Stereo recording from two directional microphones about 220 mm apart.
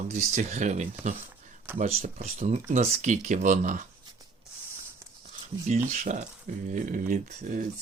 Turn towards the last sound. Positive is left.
turn(degrees=-35)  # may be behind; listen again after turning